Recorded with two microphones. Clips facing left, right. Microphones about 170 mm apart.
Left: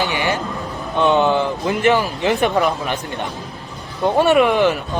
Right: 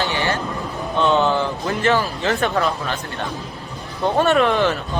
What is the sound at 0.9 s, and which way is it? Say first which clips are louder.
Speech: left 2 dB; 15° left (ahead or behind).